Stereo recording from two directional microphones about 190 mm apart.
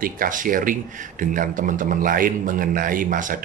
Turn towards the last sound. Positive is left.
turn(degrees=-45)  # may be behind; listen again after turning